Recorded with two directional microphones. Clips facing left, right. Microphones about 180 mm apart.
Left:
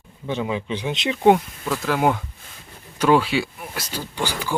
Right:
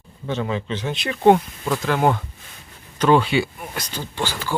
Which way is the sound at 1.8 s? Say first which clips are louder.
Even; 5° left (ahead or behind).